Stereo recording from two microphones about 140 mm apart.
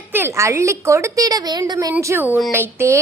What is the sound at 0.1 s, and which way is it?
A woman's voice, 15° right (ahead or behind).